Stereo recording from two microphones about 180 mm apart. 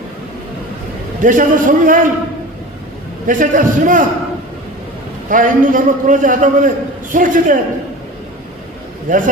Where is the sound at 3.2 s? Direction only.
50° right (ahead or behind).